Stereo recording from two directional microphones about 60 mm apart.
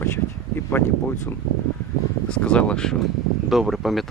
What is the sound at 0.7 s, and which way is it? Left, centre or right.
Speech, left.